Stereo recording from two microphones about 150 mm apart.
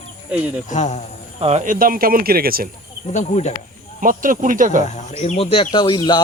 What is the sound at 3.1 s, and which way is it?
Speech, 50° left (ahead or behind).